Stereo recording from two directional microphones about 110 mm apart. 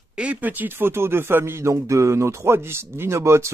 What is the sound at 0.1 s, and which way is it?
Speech, 10° right (ahead or behind).